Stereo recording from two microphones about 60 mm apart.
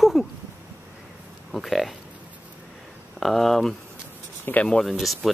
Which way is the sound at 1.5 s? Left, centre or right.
Centre.